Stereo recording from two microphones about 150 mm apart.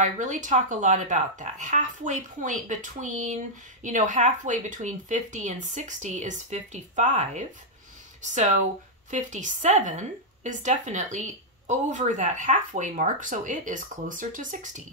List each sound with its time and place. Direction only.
0.0 s a woman's voice: 55° right (ahead or behind)